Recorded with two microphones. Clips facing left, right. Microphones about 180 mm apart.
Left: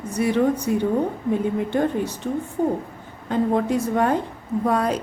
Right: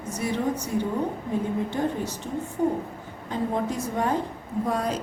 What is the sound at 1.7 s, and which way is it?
Speech, 60° left (ahead or behind).